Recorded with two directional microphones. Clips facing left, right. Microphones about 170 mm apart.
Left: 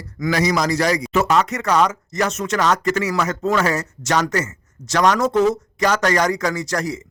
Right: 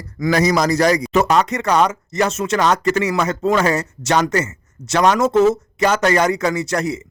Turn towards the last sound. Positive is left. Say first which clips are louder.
# right 3 dB
turn(degrees=-25)  # may be behind; listen again after turning